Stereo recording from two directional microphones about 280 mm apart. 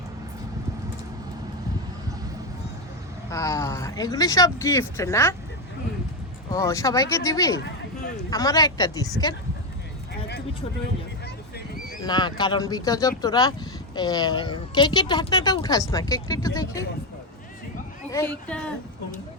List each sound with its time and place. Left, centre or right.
3.2 s speech: centre
6.5 s speech: centre
12.0 s speech: centre
18.1 s speech: centre